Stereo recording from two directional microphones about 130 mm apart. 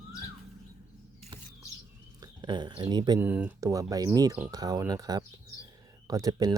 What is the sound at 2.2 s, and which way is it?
Speech, 35° right (ahead or behind).